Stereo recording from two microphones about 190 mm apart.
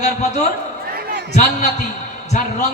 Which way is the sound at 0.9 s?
50° right (ahead or behind).